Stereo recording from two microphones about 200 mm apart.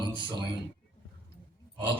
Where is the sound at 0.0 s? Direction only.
25° right (ahead or behind).